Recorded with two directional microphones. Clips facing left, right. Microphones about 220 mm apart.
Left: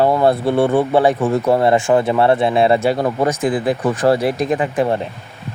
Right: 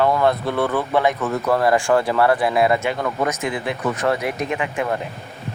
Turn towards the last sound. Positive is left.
turn(degrees=30)  # may be behind; listen again after turning